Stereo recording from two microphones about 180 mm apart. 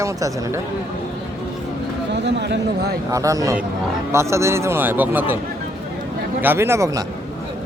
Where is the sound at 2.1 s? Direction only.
75° right (ahead or behind).